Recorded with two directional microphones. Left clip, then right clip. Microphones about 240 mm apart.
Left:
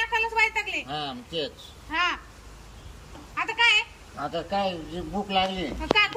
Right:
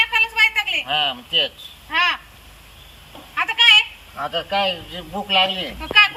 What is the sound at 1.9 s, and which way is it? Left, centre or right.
Speech, centre.